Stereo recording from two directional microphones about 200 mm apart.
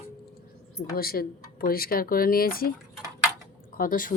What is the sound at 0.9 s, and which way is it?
Speech, 50° left (ahead or behind).